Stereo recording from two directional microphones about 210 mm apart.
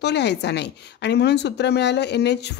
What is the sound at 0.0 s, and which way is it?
A woman's voice, 55° left (ahead or behind).